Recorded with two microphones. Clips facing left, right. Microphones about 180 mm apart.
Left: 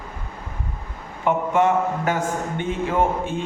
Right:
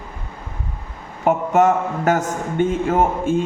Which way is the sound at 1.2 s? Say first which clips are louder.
Right 3 dB; 45° right (ahead or behind).